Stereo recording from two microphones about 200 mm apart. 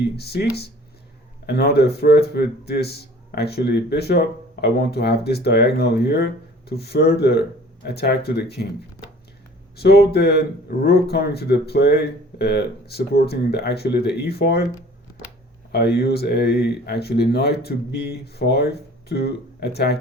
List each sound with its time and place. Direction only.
0.0 s a man's voice: 55° left (ahead or behind)
1.5 s a man's voice: 55° left (ahead or behind)
9.7 s a man's voice: 55° left (ahead or behind)
15.7 s speech: 55° left (ahead or behind)